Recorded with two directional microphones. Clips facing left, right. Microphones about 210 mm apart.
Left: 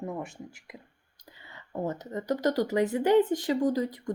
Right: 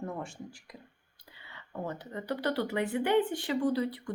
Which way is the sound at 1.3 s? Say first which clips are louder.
Left 3 dB; 40° left (ahead or behind).